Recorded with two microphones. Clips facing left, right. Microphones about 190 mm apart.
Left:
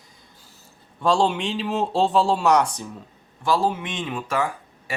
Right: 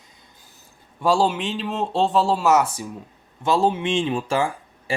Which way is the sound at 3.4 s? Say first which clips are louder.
Right 3 dB; 25° right (ahead or behind).